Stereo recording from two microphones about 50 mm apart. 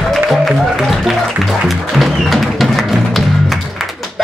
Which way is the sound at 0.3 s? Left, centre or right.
Centre.